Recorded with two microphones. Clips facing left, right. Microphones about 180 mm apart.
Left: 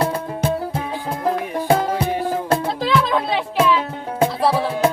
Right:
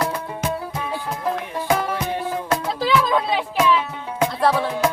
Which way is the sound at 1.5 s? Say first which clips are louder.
Left 4 dB; 30° left (ahead or behind).